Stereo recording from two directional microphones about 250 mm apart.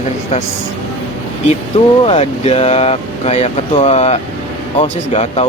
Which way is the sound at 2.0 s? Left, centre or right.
Left.